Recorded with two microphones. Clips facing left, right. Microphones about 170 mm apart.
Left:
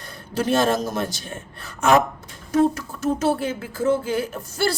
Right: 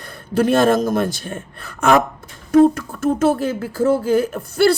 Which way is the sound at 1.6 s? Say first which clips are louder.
Right 2 dB; 55° right (ahead or behind).